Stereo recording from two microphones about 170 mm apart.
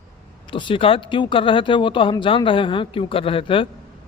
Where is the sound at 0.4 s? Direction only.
30° left (ahead or behind).